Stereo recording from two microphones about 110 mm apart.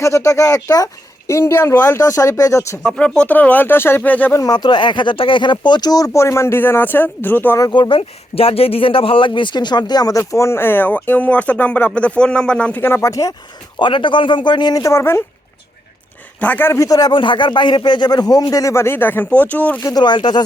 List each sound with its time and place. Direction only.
0.0 s speech: 25° left (ahead or behind)
2.8 s speech: 10° left (ahead or behind)
4.4 s speech: 40° left (ahead or behind); by 7.6 s 15° left (ahead or behind)
7.6 s speech: 45° left (ahead or behind)
13.7 s speech: 45° left (ahead or behind); by 15.2 s 25° left (ahead or behind)
16.4 s speech: 15° left (ahead or behind); by 17.2 s 35° left (ahead or behind)
17.2 s speech: 45° left (ahead or behind); by 19.8 s 15° left (ahead or behind)
19.8 s speech: 35° left (ahead or behind)